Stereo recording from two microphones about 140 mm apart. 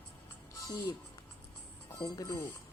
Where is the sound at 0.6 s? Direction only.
25° left (ahead or behind).